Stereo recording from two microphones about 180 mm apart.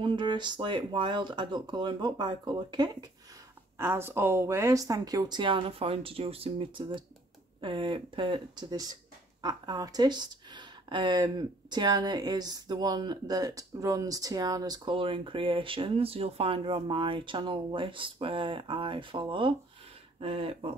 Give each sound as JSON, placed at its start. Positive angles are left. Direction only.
{"t": 0.0, "sound": "speech", "side_deg": -25}
{"t": 3.7, "sound": "speech", "side_deg": -15}